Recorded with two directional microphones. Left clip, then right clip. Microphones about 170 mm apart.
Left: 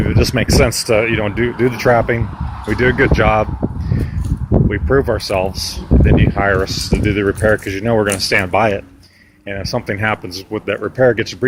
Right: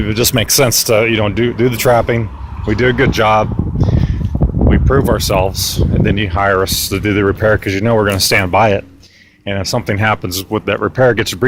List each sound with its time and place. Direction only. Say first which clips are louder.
0.0 s speech: right 2 dB; 30° right (ahead or behind)
4.7 s speech: right 2 dB; 30° right (ahead or behind)